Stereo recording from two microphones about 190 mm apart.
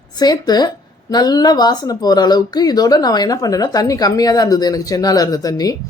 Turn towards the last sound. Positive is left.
turn(degrees=20)  # may be behind; listen again after turning